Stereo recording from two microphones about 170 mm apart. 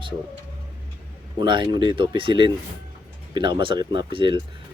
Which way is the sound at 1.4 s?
25° right (ahead or behind).